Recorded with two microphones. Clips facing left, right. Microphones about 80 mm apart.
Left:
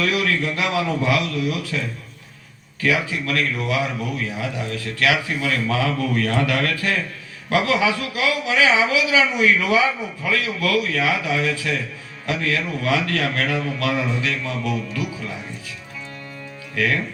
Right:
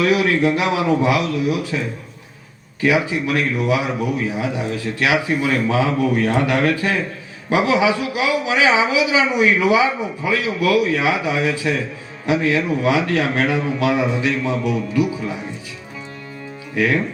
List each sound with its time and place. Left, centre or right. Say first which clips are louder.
0.0 s speech: right 5 dB; right
2.8 s speech: right 4 dB; centre
16.7 s speech: right 4 dB; right